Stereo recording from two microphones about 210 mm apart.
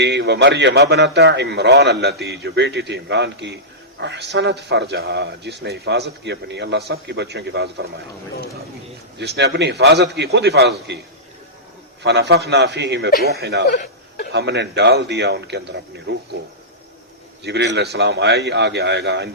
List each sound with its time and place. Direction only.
0.0 s a man's voice: 55° right (ahead or behind)
9.1 s speech: 50° right (ahead or behind)
12.0 s speech: 55° right (ahead or behind)
17.4 s a man's voice: 55° right (ahead or behind)